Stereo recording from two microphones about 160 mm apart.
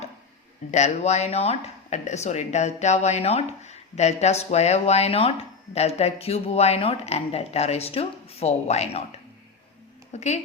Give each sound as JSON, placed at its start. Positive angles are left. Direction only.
{"t": 0.7, "sound": "speech", "side_deg": 45}
{"t": 10.1, "sound": "speech", "side_deg": 45}